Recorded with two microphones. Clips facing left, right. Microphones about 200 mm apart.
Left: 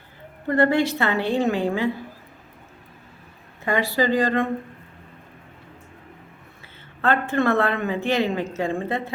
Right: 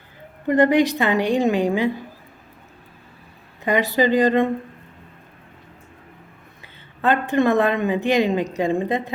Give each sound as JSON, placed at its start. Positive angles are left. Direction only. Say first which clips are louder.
{"t": 0.4, "sound": "a woman's voice", "louder": "right 3 dB", "side_deg": -15}
{"t": 3.6, "sound": "speech", "louder": "right 3 dB", "side_deg": -20}
{"t": 7.0, "sound": "a woman's voice", "louder": "right 3 dB", "side_deg": -15}